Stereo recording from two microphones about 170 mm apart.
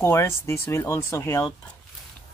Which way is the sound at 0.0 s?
15° left (ahead or behind).